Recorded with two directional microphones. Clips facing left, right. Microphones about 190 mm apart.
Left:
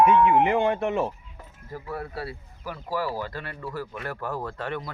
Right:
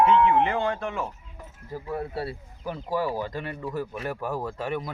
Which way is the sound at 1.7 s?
20° right (ahead or behind).